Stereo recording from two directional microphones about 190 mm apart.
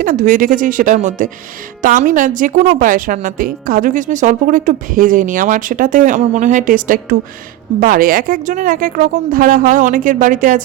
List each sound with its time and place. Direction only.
0.0 s a woman's voice: 45° right (ahead or behind)